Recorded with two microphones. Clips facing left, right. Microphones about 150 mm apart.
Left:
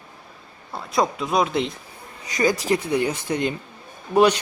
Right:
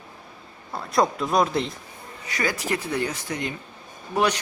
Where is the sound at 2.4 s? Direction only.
15° left (ahead or behind).